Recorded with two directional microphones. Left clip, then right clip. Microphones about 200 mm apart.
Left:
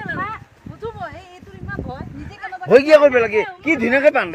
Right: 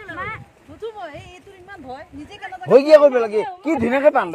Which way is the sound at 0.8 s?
40° right (ahead or behind).